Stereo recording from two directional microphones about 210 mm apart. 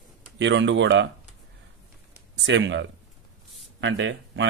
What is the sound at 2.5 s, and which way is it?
A man's voice, 60° right (ahead or behind).